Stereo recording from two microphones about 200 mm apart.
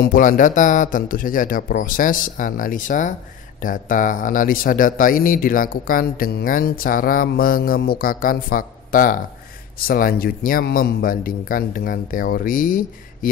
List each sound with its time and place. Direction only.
0.0 s speech: 40° left (ahead or behind)